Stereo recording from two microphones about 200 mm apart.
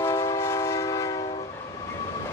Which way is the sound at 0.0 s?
15° left (ahead or behind).